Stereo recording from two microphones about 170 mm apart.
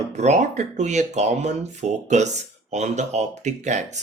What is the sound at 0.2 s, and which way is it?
Speech, 45° right (ahead or behind).